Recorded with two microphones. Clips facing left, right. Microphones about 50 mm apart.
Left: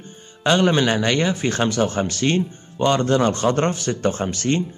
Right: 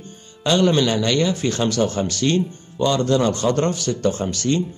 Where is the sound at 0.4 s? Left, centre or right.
Left.